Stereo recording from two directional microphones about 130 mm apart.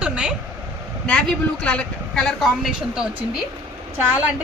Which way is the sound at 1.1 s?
10° left (ahead or behind).